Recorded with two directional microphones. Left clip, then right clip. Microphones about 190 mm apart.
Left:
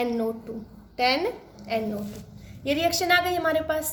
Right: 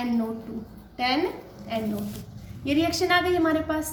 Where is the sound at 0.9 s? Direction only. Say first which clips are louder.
Left 3 dB; 50° left (ahead or behind).